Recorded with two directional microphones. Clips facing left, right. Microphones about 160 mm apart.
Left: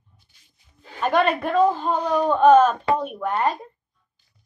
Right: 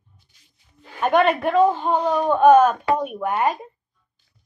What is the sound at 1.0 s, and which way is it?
A woman's voice, centre (ahead or behind).